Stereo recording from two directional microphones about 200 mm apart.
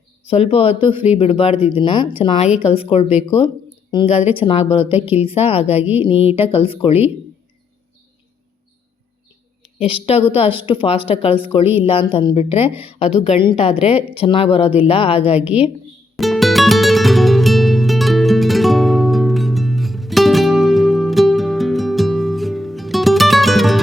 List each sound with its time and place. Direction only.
0.3 s a woman's voice: 30° left (ahead or behind)
4.8 s speech: 10° right (ahead or behind)
5.2 s a woman's voice: 30° left (ahead or behind)
5.8 s speech: 10° right (ahead or behind)
6.1 s a woman's voice: 30° left (ahead or behind)
9.8 s a woman's voice: 30° left (ahead or behind)
15.4 s speech: 5° right (ahead or behind)
16.1 s music: centre (ahead or behind)